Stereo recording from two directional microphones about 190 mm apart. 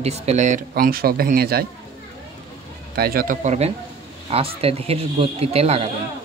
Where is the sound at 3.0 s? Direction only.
50° right (ahead or behind).